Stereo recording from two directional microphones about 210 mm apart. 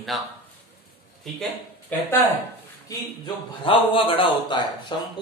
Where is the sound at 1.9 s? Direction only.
10° left (ahead or behind).